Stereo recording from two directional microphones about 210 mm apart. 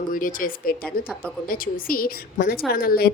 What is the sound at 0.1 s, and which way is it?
A woman's voice, 40° left (ahead or behind).